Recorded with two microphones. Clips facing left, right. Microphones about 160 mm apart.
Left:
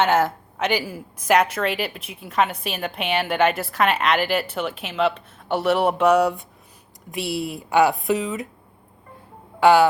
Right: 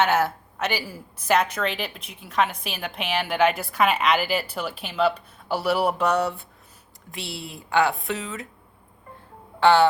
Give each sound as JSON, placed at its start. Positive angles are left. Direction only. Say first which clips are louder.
{"t": 0.0, "sound": "speech", "louder": "left 2 dB", "side_deg": -10}
{"t": 0.9, "sound": "a woman's voice", "louder": "left 3 dB", "side_deg": 10}
{"t": 7.2, "sound": "speech", "louder": "left 9 dB", "side_deg": -25}
{"t": 7.8, "sound": "speech", "louder": "left 5 dB", "side_deg": 20}
{"t": 9.6, "sound": "speech", "louder": "left 3 dB", "side_deg": 10}